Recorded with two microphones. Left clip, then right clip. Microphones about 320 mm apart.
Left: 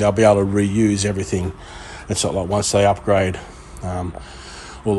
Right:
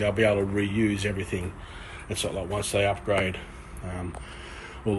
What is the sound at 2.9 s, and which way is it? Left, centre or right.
Speech, left.